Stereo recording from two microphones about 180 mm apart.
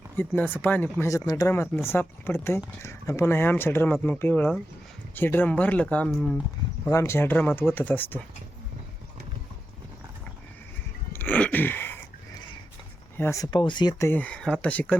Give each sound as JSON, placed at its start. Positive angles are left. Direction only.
{"t": 0.2, "sound": "speech", "side_deg": 10}
{"t": 6.8, "sound": "speech", "side_deg": 15}
{"t": 11.1, "sound": "wheeze", "side_deg": 10}
{"t": 13.1, "sound": "speech", "side_deg": 15}
{"t": 14.1, "sound": "speech", "side_deg": 5}